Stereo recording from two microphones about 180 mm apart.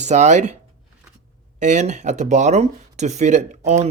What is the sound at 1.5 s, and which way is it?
Speech, 40° right (ahead or behind).